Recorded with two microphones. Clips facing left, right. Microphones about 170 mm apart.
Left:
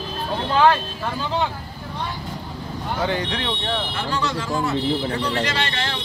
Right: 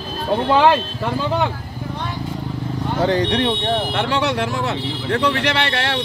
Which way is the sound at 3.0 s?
35° right (ahead or behind).